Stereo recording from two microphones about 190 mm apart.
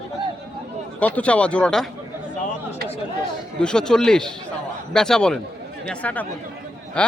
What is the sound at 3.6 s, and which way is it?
A man's voice, 5° left (ahead or behind).